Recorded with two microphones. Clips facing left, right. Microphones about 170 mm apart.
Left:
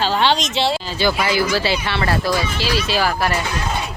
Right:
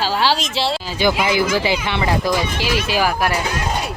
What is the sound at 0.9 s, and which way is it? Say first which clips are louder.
Speech: right 1 dB; 15° right (ahead or behind).